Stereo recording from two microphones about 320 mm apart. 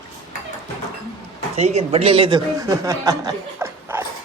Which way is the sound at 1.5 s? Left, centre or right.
Centre.